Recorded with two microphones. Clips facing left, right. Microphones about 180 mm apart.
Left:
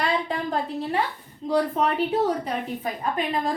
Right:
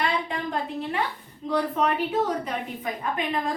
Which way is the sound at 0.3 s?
35° left (ahead or behind).